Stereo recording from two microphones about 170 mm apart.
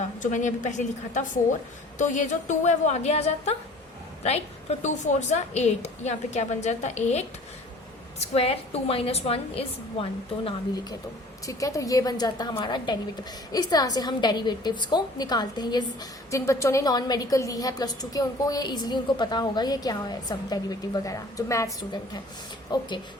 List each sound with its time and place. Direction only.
0.2 s a woman's voice: 45° left (ahead or behind)
11.4 s a woman's voice: 20° left (ahead or behind)
22.7 s a woman's voice: 25° left (ahead or behind)